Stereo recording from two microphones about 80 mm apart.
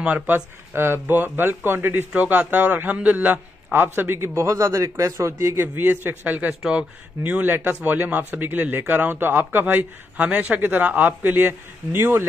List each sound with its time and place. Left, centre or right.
0.0 s speech: centre
0.7 s speech: right
4.4 s a man's voice: right